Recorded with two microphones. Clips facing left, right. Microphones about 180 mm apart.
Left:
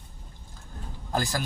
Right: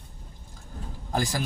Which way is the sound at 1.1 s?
15° right (ahead or behind).